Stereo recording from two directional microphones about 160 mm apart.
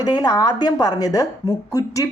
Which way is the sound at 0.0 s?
25° left (ahead or behind).